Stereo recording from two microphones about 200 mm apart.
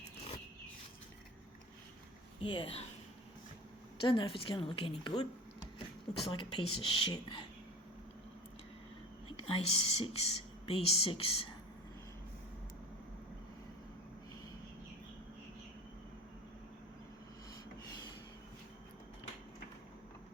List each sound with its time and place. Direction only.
2.4 s a woman's voice: 25° left (ahead or behind)
4.0 s a woman's voice: 25° left (ahead or behind)
9.3 s a woman's voice: 30° left (ahead or behind)